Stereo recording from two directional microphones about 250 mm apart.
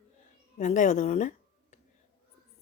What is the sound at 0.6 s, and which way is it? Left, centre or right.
Speech, left.